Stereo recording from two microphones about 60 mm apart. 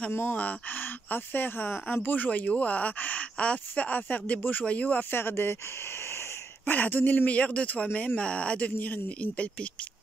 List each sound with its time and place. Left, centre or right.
0.1 s speech: left
0.4 s speech: left
5.1 s speech: left
6.6 s speech: left